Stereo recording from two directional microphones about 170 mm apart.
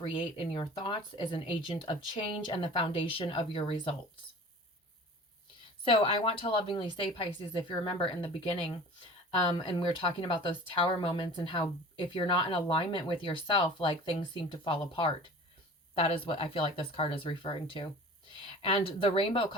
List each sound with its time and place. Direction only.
0.0 s speech: 30° left (ahead or behind)
5.8 s a woman's voice: 30° left (ahead or behind)